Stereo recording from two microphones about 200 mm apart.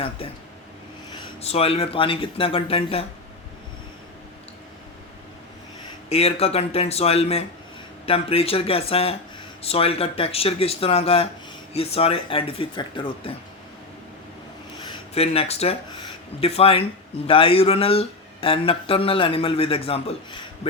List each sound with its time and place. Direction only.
1.1 s speech: 30° left (ahead or behind)
6.1 s speech: 30° left (ahead or behind)
14.8 s speech: 30° left (ahead or behind)